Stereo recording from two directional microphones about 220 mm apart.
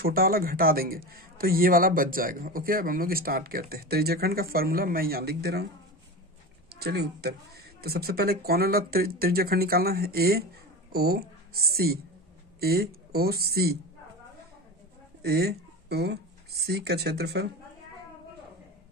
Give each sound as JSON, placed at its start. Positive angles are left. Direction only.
{"t": 0.0, "sound": "a man's voice", "side_deg": -40}
{"t": 6.7, "sound": "speech", "side_deg": -45}
{"t": 15.2, "sound": "speech", "side_deg": -45}